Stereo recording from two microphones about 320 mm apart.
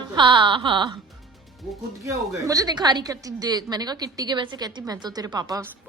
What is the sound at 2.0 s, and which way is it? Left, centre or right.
A woman's voice, centre.